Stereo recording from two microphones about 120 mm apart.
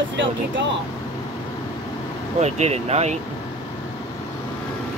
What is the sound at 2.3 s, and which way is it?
Speech, 65° right (ahead or behind).